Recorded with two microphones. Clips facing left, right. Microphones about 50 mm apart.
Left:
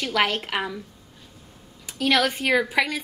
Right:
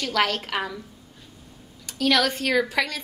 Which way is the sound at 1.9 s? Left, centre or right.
Centre.